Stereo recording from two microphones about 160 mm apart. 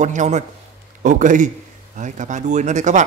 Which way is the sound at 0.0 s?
50° right (ahead or behind).